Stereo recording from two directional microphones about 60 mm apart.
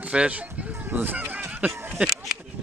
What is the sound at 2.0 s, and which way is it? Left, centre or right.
Speech, right.